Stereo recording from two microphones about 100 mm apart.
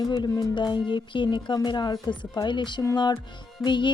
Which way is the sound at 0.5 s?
50° left (ahead or behind).